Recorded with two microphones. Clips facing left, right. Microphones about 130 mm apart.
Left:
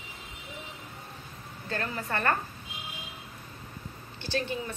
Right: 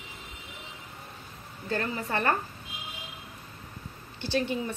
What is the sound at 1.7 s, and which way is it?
Speech, 25° right (ahead or behind).